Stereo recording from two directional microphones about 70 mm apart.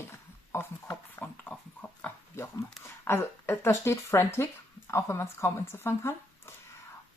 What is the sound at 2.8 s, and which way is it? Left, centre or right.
Speech, left.